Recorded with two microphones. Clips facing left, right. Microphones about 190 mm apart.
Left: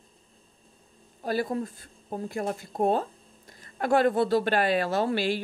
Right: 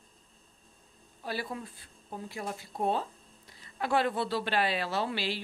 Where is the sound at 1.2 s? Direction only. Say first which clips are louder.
Left 9 dB; 45° left (ahead or behind).